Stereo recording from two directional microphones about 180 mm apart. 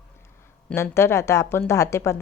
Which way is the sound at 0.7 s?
15° left (ahead or behind).